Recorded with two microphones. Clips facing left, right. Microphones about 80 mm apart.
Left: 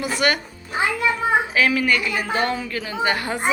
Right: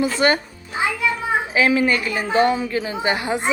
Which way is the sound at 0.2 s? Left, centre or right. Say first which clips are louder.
Right 3 dB; right.